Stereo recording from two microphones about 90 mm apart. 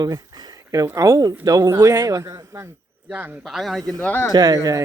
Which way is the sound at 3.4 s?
Centre (ahead or behind).